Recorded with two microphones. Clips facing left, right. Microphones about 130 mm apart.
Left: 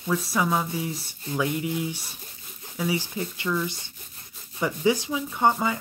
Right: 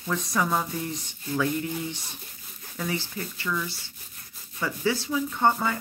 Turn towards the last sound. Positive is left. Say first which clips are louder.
# left 1 dB
turn(degrees=15)  # may be behind; listen again after turning